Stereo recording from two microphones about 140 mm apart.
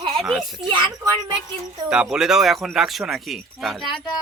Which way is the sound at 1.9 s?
5° right (ahead or behind).